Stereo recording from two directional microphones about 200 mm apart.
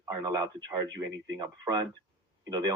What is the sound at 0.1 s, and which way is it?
Speech, 15° right (ahead or behind).